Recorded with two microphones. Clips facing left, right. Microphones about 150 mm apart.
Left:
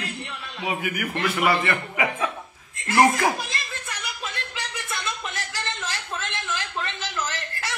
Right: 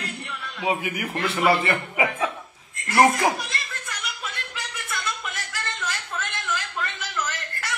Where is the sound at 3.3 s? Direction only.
25° left (ahead or behind).